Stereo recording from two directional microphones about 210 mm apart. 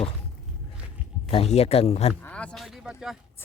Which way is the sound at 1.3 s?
30° left (ahead or behind).